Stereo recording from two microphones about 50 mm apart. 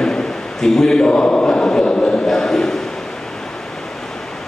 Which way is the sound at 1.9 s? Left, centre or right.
Left.